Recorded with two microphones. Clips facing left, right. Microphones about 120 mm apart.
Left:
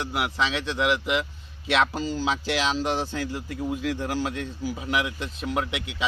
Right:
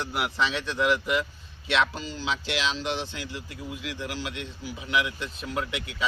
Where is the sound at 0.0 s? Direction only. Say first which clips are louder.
Left 1 dB; 15° left (ahead or behind).